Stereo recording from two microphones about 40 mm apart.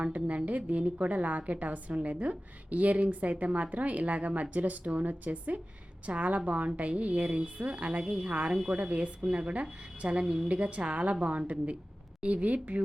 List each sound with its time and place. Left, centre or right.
0.0 s a woman's voice: right